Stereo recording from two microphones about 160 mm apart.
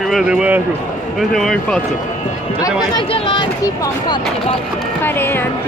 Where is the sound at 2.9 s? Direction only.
35° left (ahead or behind).